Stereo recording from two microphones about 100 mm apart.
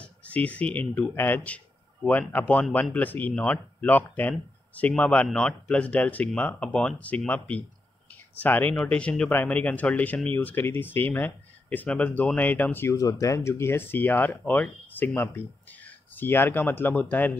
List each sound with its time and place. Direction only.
0.0 s speech: 15° left (ahead or behind)
12.9 s speech: 35° left (ahead or behind); by 17.4 s 15° left (ahead or behind)